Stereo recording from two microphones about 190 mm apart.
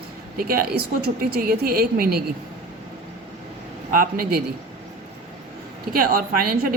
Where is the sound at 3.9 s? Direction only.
50° right (ahead or behind).